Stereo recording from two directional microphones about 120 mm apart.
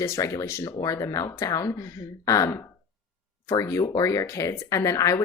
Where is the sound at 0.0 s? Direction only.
30° left (ahead or behind).